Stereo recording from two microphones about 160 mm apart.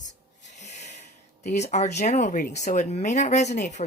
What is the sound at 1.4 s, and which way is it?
Speech, 45° left (ahead or behind).